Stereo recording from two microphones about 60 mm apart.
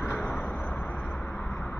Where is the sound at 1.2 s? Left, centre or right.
Centre.